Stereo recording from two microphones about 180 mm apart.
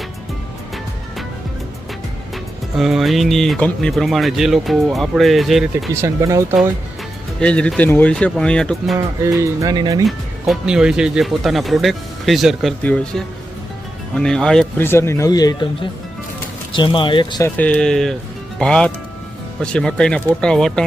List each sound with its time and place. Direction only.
2.3 s speech: centre (ahead or behind)
5.9 s speech: 15° right (ahead or behind)
7.3 s speech: 5° left (ahead or behind)
9.4 s speech: 20° right (ahead or behind)
10.1 s speech: centre (ahead or behind); by 17.4 s 25° left (ahead or behind)
17.4 s speech: 10° left (ahead or behind)